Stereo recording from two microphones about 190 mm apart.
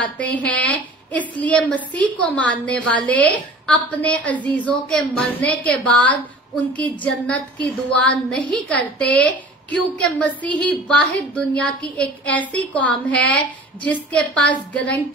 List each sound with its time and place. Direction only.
0.0 s a woman's voice: 5° left (ahead or behind)